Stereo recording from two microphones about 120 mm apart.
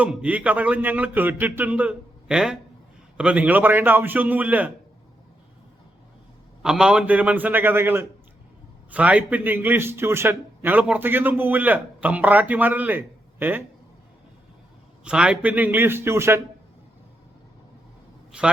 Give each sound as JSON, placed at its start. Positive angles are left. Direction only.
{"t": 0.0, "sound": "a man's voice", "side_deg": -10}
{"t": 6.6, "sound": "a man's voice", "side_deg": -5}
{"t": 15.0, "sound": "a man's voice", "side_deg": -10}
{"t": 18.3, "sound": "a man's voice", "side_deg": -10}